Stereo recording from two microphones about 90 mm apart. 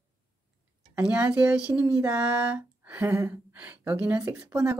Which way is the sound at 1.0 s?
15° right (ahead or behind).